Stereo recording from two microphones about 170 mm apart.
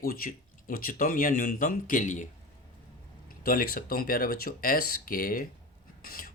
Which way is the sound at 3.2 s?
60° left (ahead or behind).